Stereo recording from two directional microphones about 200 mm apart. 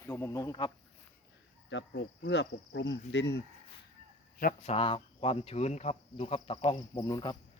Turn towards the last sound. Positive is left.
turn(degrees=20)  # may be behind; listen again after turning